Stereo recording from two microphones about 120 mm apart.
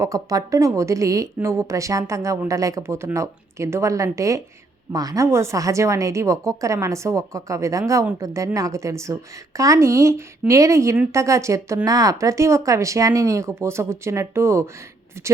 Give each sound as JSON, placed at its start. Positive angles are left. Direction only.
{"t": 0.0, "sound": "a woman's voice", "side_deg": -30}